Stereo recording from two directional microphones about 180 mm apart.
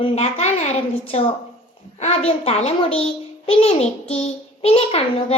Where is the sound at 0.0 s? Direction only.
35° left (ahead or behind).